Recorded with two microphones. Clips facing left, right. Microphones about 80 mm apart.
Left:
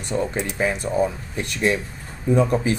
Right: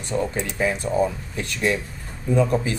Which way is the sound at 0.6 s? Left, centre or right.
Centre.